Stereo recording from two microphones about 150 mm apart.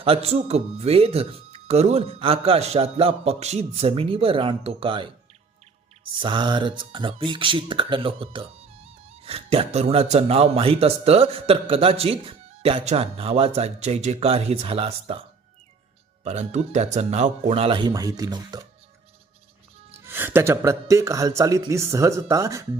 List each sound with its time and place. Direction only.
0.0 s speech: 40° right (ahead or behind)
6.2 s speech: 30° right (ahead or behind)
16.2 s speech: 45° right (ahead or behind); by 18.6 s 30° right (ahead or behind)
20.1 s speech: 15° right (ahead or behind)